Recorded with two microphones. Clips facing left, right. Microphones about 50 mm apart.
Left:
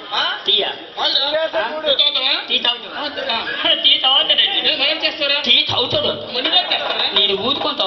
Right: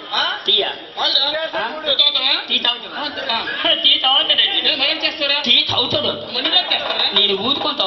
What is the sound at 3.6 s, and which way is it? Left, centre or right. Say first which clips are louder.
Speech: even; centre.